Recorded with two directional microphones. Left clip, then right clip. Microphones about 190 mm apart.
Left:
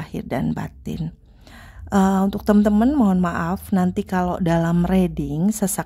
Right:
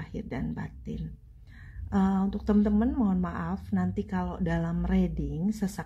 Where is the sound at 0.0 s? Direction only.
40° left (ahead or behind).